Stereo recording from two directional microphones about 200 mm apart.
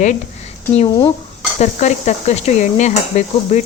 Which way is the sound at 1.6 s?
35° left (ahead or behind).